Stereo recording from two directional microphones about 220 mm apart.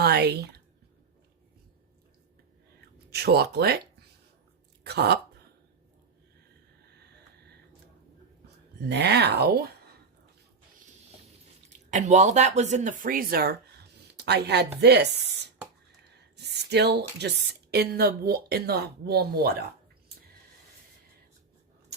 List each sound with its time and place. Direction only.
0.0 s a sound: 50° right (ahead or behind)
3.1 s speech: 45° right (ahead or behind)
8.8 s speech: 50° right (ahead or behind)
11.9 s speech: 35° right (ahead or behind)